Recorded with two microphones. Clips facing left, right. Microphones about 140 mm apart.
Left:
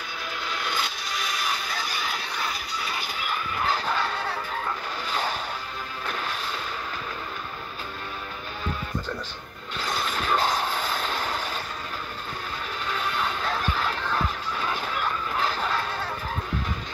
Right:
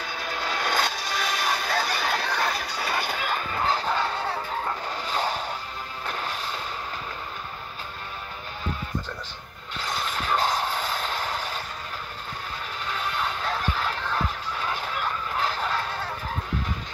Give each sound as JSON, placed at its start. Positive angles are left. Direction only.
{"t": 0.6, "sound": "music", "side_deg": -55}
{"t": 1.6, "sound": "fowl", "side_deg": -60}
{"t": 2.9, "sound": "music", "side_deg": -60}
{"t": 3.5, "sound": "music", "side_deg": -25}
{"t": 6.0, "sound": "artillery fire", "side_deg": -30}
{"t": 9.8, "sound": "a sound", "side_deg": -20}
{"t": 13.2, "sound": "music", "side_deg": -25}
{"t": 14.9, "sound": "a sound", "side_deg": -25}